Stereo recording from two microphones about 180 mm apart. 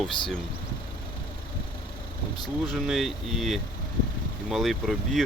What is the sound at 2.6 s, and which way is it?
Speech, centre (ahead or behind).